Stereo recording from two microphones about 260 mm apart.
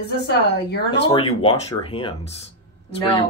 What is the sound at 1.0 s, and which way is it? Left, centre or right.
Speech, left.